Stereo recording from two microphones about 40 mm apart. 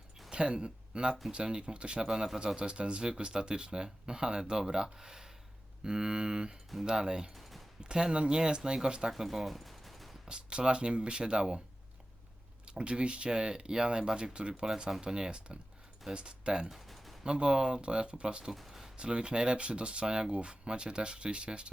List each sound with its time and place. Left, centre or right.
0.3 s speech: right; by 10.2 s centre
10.2 s speech: right
12.6 s speech: right
16.6 s a sound: centre
17.2 s speech: right
18.5 s a sound: centre
18.9 s speech: right